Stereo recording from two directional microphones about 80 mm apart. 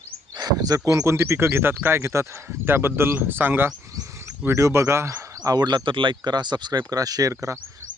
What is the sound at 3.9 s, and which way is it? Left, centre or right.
Wild animals, right.